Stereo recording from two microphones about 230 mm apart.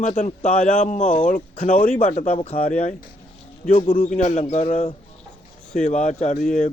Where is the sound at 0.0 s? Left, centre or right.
Left.